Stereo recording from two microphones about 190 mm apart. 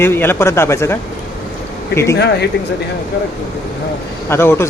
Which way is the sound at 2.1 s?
60° left (ahead or behind).